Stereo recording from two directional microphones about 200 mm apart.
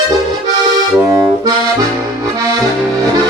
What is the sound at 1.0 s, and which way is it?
Accordion, 10° right (ahead or behind).